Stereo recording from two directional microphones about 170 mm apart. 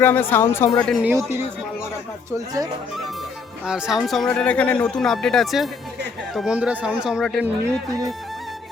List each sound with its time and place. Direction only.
0.0 s speech: 10° left (ahead or behind)
1.0 s speech: 15° right (ahead or behind)
3.7 s speech: 5° right (ahead or behind)
7.4 s speech: 15° right (ahead or behind)